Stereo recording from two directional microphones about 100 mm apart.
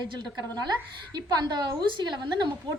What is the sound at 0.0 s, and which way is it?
A woman's voice, 45° right (ahead or behind).